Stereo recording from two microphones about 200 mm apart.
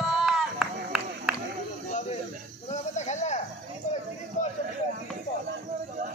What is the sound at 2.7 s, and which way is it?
Snake, 35° left (ahead or behind).